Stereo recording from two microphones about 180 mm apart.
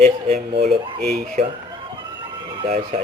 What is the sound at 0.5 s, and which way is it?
Speech, 60° right (ahead or behind).